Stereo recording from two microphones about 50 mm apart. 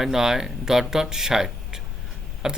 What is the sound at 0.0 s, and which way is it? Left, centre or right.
Speech, centre.